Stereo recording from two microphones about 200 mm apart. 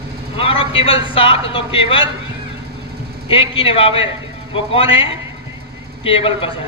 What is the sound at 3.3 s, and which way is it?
A man's voice, 25° left (ahead or behind).